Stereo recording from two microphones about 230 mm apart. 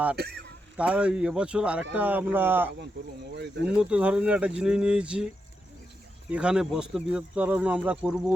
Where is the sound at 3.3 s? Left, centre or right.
Right.